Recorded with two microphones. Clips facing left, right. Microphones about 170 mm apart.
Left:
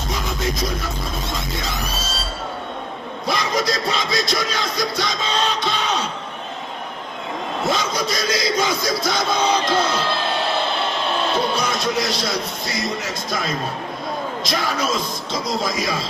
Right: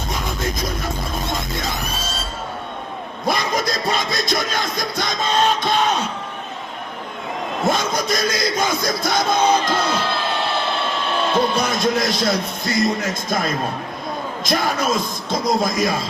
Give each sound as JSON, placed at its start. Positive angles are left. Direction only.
{"t": 3.2, "sound": "music", "side_deg": -50}
{"t": 7.7, "sound": "music", "side_deg": -50}
{"t": 11.5, "sound": "a man's voice", "side_deg": -50}